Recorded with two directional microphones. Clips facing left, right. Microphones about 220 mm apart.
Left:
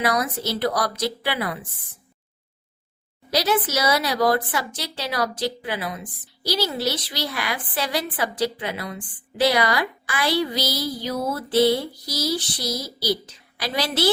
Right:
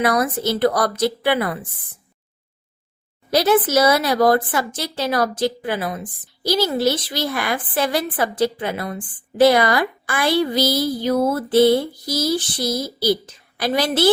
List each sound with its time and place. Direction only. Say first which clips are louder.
0.0 s speech: right 5 dB; 50° right (ahead or behind)
3.2 s speech: right 6 dB; 50° right (ahead or behind)